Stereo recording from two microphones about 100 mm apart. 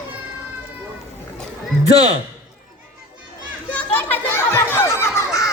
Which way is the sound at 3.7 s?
15° left (ahead or behind).